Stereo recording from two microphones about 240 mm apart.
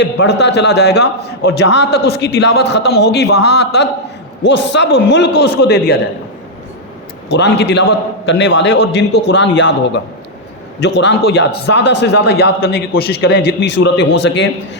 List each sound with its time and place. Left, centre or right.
0.0 s a man's voice: left
7.3 s a man's voice: left